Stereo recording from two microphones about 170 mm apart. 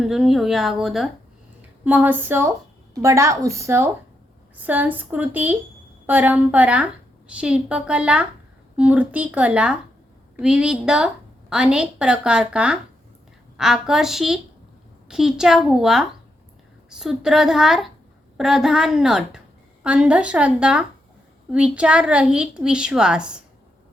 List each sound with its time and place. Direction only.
0.0 s a woman's voice: centre (ahead or behind)